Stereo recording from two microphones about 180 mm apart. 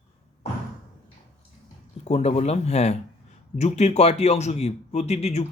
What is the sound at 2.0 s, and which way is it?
A man's voice, 35° left (ahead or behind).